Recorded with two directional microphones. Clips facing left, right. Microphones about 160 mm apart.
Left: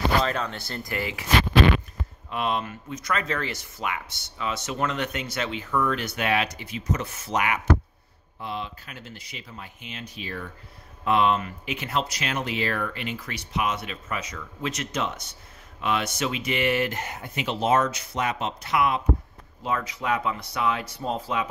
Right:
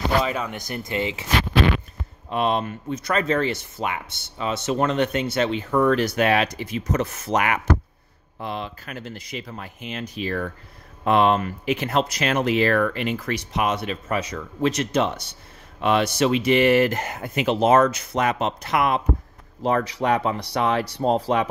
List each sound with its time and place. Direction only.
0.2 s speech: 10° right (ahead or behind)
2.2 s speech: 30° right (ahead or behind)
15.8 s speech: 35° right (ahead or behind)
16.7 s speech: 90° right
17.0 s speech: 50° right (ahead or behind)